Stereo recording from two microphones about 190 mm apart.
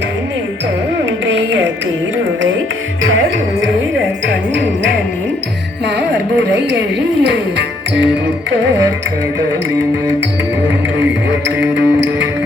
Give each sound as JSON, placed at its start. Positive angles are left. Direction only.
{"t": 1.3, "sound": "music", "side_deg": -70}
{"t": 3.0, "sound": "music", "side_deg": -90}
{"t": 6.7, "sound": "speech", "side_deg": -65}
{"t": 11.3, "sound": "music", "side_deg": -65}